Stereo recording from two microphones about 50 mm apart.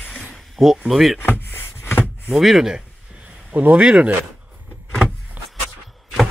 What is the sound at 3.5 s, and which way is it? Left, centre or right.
Speech, right.